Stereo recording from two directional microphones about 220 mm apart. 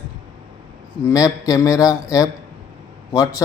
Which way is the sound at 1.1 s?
15° left (ahead or behind).